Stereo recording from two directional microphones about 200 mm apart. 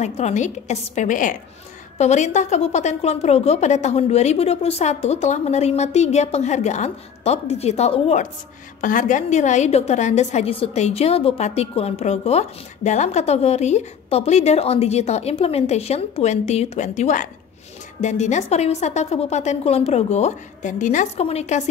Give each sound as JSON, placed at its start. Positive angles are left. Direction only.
{"t": 0.0, "sound": "a woman's voice", "side_deg": 35}